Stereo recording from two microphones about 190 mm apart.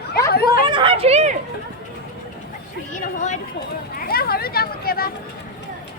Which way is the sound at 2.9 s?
40° left (ahead or behind).